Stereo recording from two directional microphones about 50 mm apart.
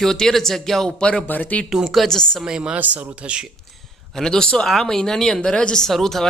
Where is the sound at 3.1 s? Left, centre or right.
Right.